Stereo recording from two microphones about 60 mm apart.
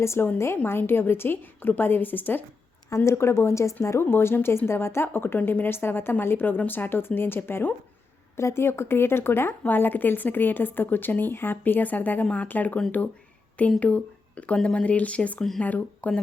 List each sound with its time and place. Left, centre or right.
0.0 s speech: left
0.6 s a woman's voice: left
2.9 s speech: left
4.0 s a woman's voice: left
8.4 s speech: left
9.5 s a woman's voice: left